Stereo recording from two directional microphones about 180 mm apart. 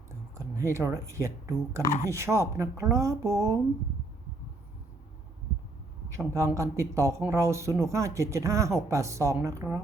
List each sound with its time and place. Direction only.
0.3 s a sound: 15° right (ahead or behind)
1.0 s speech: 15° right (ahead or behind)
6.1 s speech: 15° right (ahead or behind)